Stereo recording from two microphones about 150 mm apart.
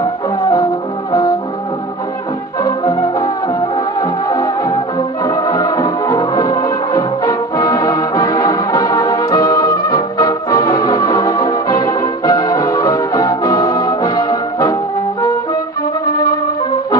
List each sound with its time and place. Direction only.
2.6 s music: 25° left (ahead or behind)
4.0 s music: 25° left (ahead or behind)